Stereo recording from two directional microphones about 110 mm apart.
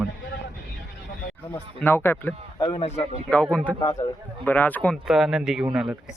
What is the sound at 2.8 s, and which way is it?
Speech, 70° left (ahead or behind).